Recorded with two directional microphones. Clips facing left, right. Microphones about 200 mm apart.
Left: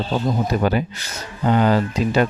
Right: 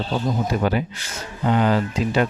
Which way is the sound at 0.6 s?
45° left (ahead or behind).